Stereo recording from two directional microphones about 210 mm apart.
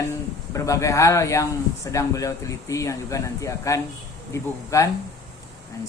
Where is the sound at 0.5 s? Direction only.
15° left (ahead or behind).